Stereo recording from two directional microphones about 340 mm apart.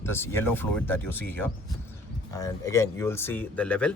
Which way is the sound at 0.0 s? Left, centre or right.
Centre.